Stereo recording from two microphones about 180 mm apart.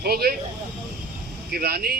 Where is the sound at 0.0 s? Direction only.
60° right (ahead or behind).